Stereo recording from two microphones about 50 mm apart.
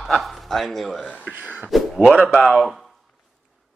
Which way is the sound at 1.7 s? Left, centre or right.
Centre.